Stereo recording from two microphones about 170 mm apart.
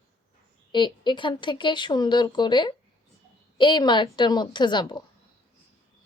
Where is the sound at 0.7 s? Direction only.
30° left (ahead or behind).